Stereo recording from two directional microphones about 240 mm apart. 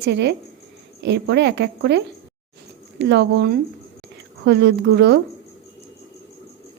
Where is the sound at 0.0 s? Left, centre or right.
Right.